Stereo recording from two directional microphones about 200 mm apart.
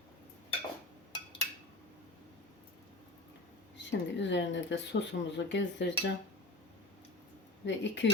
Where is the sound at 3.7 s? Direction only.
65° left (ahead or behind).